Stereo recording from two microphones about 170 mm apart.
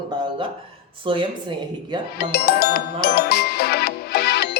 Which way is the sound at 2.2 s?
70° left (ahead or behind).